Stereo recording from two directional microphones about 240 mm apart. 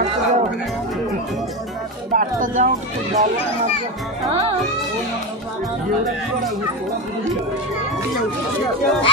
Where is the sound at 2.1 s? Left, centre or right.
Right.